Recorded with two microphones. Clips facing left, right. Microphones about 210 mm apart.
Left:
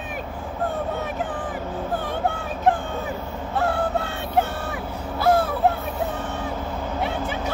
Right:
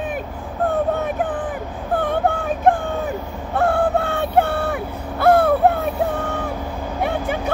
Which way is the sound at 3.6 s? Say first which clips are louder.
Right 5 dB; 55° right (ahead or behind).